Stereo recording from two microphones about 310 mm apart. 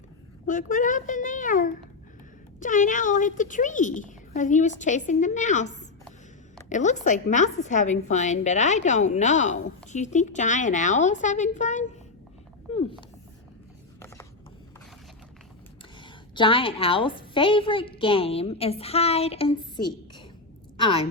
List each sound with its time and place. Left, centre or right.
0.4 s speech: left
12.7 s a sound: centre
16.0 s a woman's voice: centre